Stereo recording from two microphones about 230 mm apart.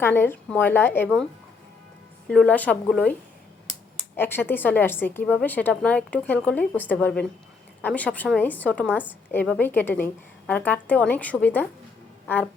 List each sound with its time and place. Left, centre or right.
0.0 s a woman's voice: centre
4.2 s a woman's voice: centre